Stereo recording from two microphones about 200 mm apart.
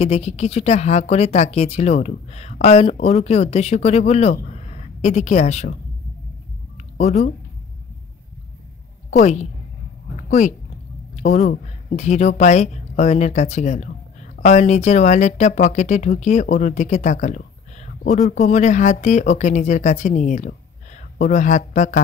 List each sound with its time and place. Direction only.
0.0 s a woman's voice: 30° left (ahead or behind)
7.0 s a woman's voice: 35° left (ahead or behind)
9.1 s a woman's voice: 35° left (ahead or behind)